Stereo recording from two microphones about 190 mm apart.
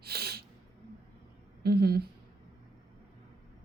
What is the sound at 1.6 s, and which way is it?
Speech, 55° right (ahead or behind).